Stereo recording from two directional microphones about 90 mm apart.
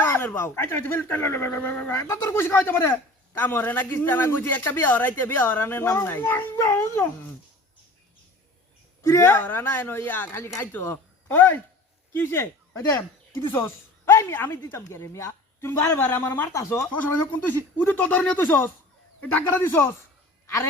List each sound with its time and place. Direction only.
0.0 s speech: 25° left (ahead or behind)
9.0 s speech: 30° left (ahead or behind)
17.8 s speech: 20° left (ahead or behind)